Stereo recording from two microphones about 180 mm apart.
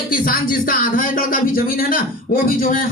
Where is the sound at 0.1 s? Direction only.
50° left (ahead or behind).